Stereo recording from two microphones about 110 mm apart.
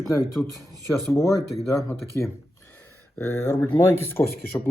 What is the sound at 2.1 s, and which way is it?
Speech, 20° left (ahead or behind).